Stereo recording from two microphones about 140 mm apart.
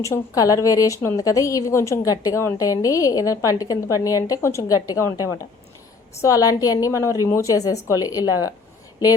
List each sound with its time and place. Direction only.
0.0 s a woman's voice: 25° left (ahead or behind)